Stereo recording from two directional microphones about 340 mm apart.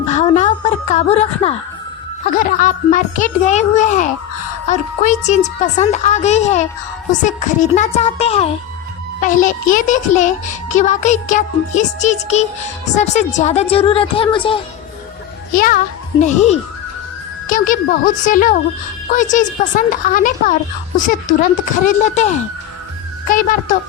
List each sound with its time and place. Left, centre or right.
0.1 s a sound: left
2.2 s a child's voice: left
21.8 s a child's voice: left